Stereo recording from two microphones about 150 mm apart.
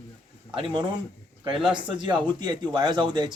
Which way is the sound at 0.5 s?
35° right (ahead or behind).